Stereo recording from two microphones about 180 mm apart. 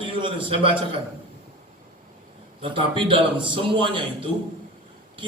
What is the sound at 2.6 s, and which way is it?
A man's voice, 30° right (ahead or behind).